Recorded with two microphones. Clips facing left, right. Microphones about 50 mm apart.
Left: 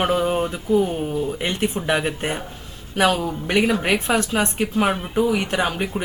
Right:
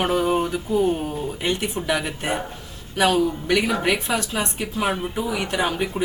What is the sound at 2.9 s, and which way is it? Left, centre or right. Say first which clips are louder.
Speech: even; left.